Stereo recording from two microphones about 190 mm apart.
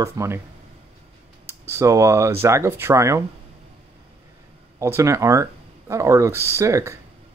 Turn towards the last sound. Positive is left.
turn(degrees=-15)  # may be behind; listen again after turning